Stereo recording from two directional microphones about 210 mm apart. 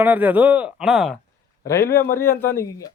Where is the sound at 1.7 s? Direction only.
10° left (ahead or behind).